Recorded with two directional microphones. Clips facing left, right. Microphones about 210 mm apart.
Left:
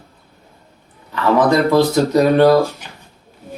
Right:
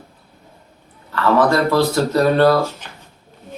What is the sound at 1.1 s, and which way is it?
A man's voice, 15° left (ahead or behind).